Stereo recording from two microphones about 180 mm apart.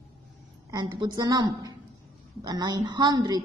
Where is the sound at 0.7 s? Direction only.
25° right (ahead or behind).